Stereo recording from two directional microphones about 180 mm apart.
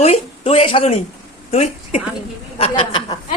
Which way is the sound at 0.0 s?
35° left (ahead or behind).